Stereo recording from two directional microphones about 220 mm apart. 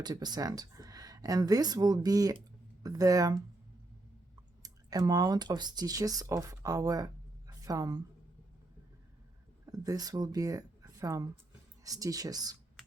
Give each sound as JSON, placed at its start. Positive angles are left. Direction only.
{"t": 0.0, "sound": "speech", "side_deg": -20}
{"t": 4.6, "sound": "speech", "side_deg": -15}
{"t": 9.6, "sound": "speech", "side_deg": -15}